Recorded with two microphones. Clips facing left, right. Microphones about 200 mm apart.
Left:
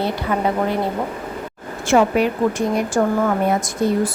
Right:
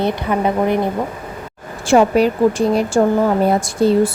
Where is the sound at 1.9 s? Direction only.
35° right (ahead or behind).